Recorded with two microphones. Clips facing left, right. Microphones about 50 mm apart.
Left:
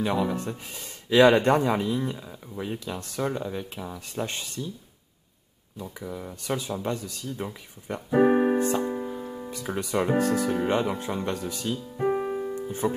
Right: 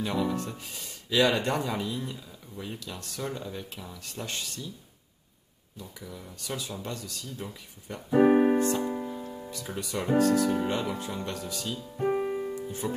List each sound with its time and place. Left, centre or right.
0.0 s speech: centre
5.8 s speech: left
8.2 s keyboard: centre
8.5 s music: centre
9.5 s speech: left
12.0 s piano: centre
12.8 s speech: left